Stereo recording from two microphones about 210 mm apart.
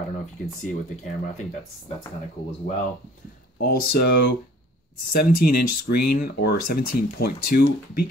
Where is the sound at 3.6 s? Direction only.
50° left (ahead or behind).